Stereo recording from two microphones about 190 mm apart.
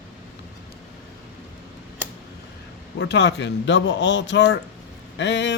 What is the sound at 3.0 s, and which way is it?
Speech, 65° left (ahead or behind).